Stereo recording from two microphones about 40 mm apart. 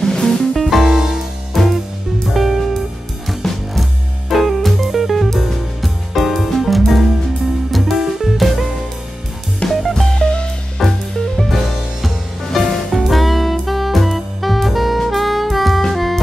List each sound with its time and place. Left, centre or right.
0.0 s music: centre
0.6 s music: centre
1.5 s music: centre
9.7 s music: centre
10.1 s music: left
10.8 s music: centre
13.0 s saxophone: centre
15.9 s music: centre